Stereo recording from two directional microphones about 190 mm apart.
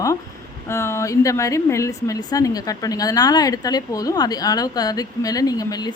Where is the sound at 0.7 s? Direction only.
15° left (ahead or behind).